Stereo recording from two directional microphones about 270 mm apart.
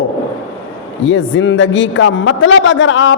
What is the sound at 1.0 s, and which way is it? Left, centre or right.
A man's voice, left.